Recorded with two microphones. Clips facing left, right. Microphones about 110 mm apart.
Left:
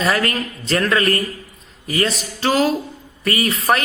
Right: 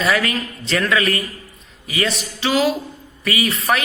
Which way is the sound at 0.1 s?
40° left (ahead or behind).